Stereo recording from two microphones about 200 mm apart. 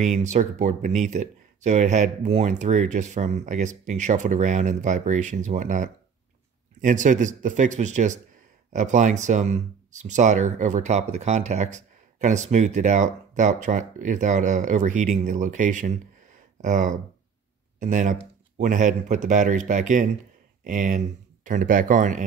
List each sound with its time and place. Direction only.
0.0 s speech: 35° right (ahead or behind)